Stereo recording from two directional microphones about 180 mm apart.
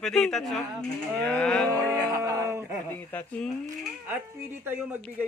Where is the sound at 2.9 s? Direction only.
10° left (ahead or behind).